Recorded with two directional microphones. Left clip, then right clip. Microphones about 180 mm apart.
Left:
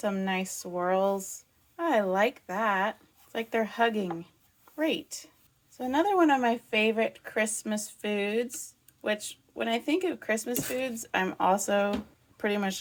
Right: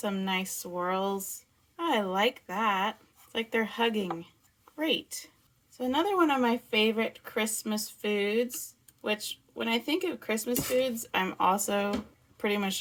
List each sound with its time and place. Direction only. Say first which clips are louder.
0.0 s speech: left 1 dB; 15° left (ahead or behind)